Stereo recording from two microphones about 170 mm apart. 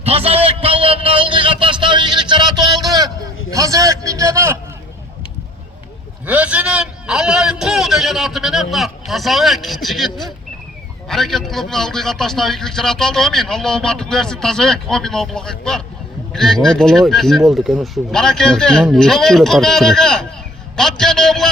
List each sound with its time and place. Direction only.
0.0 s a man's voice: 35° right (ahead or behind)
2.8 s a sound: 20° right (ahead or behind)
3.5 s a man's voice: 20° right (ahead or behind)
6.2 s a man's voice: 10° right (ahead or behind)